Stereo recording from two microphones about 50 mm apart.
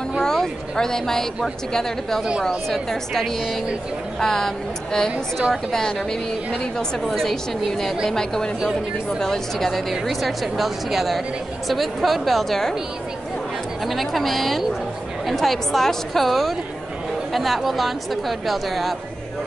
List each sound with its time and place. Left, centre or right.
0.2 s a woman's voice: centre
7.1 s a woman's voice: centre
13.8 s a woman's voice: centre